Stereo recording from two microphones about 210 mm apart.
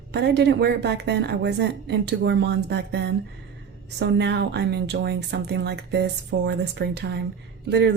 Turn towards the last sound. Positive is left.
turn(degrees=-55)  # may be behind; listen again after turning